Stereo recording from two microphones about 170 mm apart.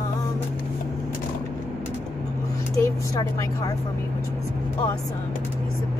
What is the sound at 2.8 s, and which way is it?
Speech, 20° left (ahead or behind).